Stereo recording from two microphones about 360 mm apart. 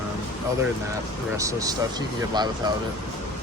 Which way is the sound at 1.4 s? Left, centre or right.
Centre.